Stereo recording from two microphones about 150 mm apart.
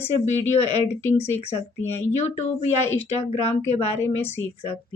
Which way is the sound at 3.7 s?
45° left (ahead or behind).